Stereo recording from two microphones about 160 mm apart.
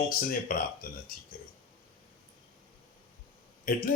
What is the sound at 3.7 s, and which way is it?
Speech, 65° left (ahead or behind).